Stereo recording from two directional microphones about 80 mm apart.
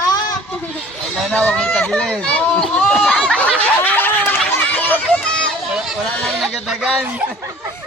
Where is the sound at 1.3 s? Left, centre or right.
Centre.